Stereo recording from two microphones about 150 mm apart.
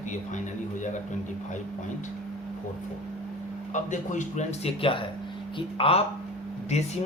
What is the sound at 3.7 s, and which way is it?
A man's voice, 55° left (ahead or behind).